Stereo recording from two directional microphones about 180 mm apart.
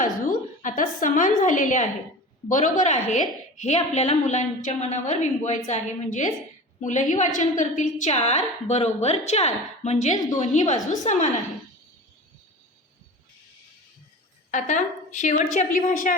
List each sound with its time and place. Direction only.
0.0 s a woman's voice: 45° left (ahead or behind)
14.5 s a woman's voice: 40° left (ahead or behind)